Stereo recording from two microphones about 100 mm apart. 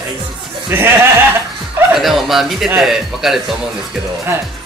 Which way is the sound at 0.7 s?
25° right (ahead or behind).